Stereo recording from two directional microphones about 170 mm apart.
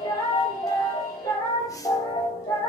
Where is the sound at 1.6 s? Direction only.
20° left (ahead or behind).